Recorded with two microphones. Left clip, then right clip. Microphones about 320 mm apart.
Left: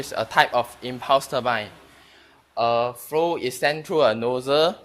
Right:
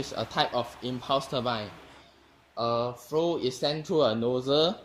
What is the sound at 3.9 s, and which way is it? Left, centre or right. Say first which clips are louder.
Speech: left 4 dB; left.